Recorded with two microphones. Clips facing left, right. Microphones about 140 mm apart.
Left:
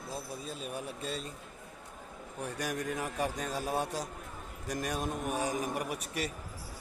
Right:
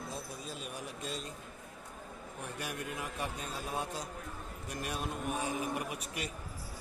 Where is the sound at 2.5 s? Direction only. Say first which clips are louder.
Left 6 dB; 40° left (ahead or behind).